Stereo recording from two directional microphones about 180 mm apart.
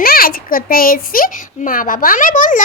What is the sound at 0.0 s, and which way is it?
A child's voice, 55° left (ahead or behind).